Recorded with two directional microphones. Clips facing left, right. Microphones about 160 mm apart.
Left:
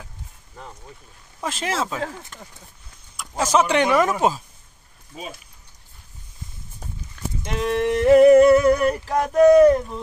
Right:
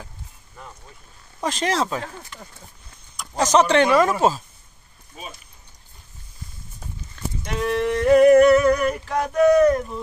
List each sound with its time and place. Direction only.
1.4 s speech: 5° left (ahead or behind)
2.3 s speech: 45° left (ahead or behind)
3.2 s speech: 5° left (ahead or behind)
7.4 s a sound: 20° left (ahead or behind)